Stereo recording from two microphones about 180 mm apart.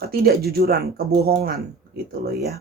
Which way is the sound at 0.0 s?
60° right (ahead or behind).